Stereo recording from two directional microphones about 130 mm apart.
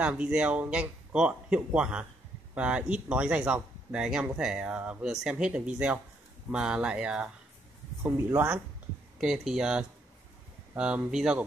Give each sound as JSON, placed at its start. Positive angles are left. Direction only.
{"t": 0.0, "sound": "speech", "side_deg": -10}
{"t": 9.2, "sound": "speech", "side_deg": -5}